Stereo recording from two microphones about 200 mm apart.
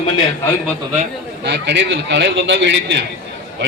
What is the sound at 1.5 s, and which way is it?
A man's voice, 60° right (ahead or behind).